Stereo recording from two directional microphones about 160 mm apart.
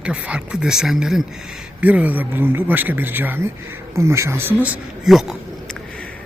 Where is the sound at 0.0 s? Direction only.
5° right (ahead or behind).